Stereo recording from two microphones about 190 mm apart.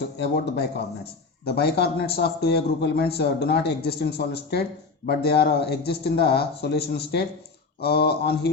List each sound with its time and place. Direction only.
0.0 s a man's voice: 60° left (ahead or behind)